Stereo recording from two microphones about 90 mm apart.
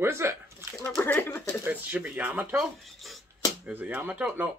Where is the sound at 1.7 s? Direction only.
20° right (ahead or behind).